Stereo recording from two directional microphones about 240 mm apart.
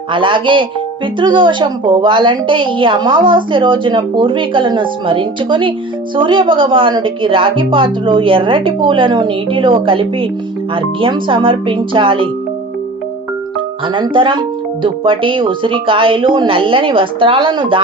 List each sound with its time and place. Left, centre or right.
0.1 s speech: right
13.8 s speech: right